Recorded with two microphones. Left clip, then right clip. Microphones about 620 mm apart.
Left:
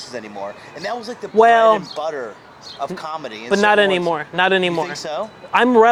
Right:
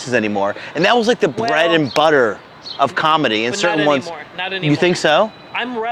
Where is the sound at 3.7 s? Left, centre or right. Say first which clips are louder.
Left 2 dB; left.